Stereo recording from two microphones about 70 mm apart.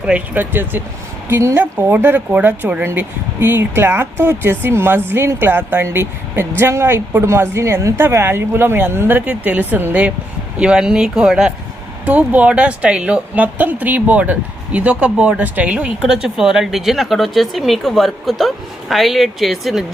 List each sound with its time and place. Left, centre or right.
0.0 s speech: centre
1.3 s a woman's voice: right
10.6 s speech: centre
12.0 s speech: right; by 19.8 s centre